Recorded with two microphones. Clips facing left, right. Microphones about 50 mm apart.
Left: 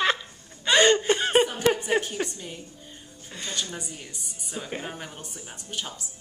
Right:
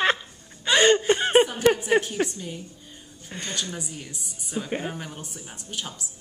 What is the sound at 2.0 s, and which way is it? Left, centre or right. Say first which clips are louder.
Speech: right 4 dB; centre.